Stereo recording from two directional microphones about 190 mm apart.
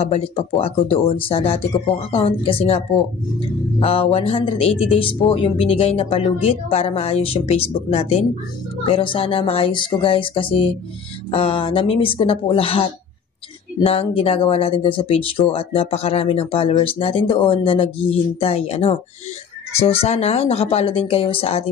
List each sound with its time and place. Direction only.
0.0 s speech: 30° left (ahead or behind)
3.8 s speech: 30° left (ahead or behind)